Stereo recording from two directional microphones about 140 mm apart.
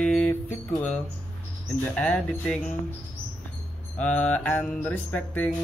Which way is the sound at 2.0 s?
10° left (ahead or behind).